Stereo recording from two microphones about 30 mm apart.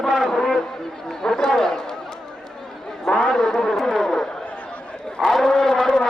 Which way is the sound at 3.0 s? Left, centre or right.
Left.